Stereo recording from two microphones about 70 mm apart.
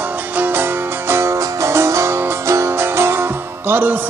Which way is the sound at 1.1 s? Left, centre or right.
Right.